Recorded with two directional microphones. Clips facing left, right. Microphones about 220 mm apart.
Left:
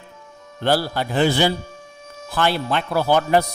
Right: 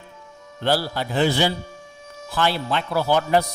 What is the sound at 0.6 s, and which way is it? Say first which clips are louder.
Speech: left 2 dB; 50° left (ahead or behind).